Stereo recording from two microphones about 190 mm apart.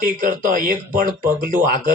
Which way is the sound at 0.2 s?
45° right (ahead or behind).